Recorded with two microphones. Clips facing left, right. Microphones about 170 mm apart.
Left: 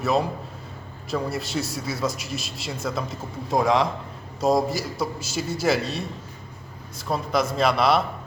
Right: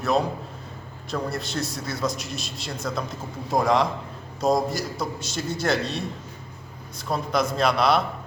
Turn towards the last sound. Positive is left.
turn(degrees=0)  # may be behind; listen again after turning